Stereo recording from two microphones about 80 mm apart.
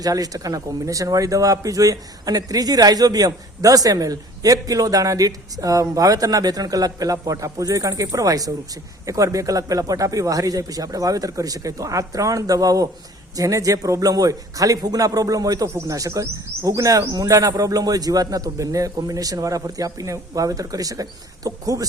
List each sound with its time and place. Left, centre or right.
0.0 s speech: right